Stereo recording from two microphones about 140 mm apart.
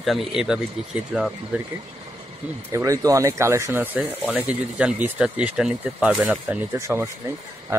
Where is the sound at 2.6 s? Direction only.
20° right (ahead or behind).